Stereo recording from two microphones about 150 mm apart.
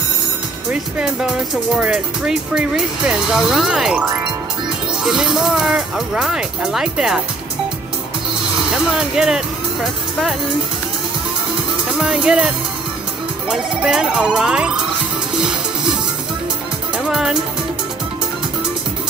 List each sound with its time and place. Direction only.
0.7 s speech: 5° right (ahead or behind)
5.0 s speech: centre (ahead or behind)
8.9 s speech: 5° right (ahead or behind)
12.0 s speech: 5° right (ahead or behind)
13.5 s speech: 5° right (ahead or behind)
15.3 s music: 5° right (ahead or behind)
17.1 s speech: 5° right (ahead or behind)